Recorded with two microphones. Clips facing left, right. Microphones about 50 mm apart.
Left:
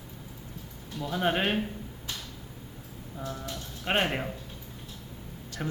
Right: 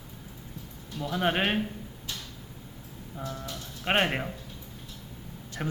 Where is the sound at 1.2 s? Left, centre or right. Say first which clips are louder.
Even; centre.